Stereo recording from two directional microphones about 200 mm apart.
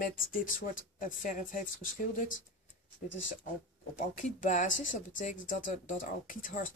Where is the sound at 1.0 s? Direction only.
40° left (ahead or behind).